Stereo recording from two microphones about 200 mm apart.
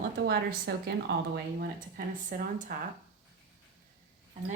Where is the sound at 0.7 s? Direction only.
55° right (ahead or behind).